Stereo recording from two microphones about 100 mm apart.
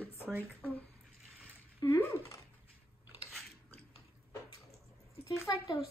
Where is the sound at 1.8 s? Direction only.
45° left (ahead or behind).